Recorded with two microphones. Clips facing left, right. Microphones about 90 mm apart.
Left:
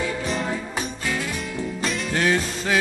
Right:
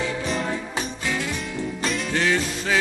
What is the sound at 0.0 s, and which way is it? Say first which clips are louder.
Music: even; centre (ahead or behind).